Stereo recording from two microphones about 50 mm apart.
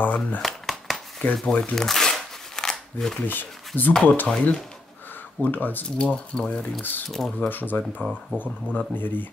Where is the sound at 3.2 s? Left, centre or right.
Left.